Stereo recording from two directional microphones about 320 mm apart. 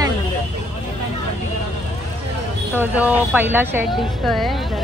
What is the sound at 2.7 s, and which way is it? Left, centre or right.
A woman's voice, centre.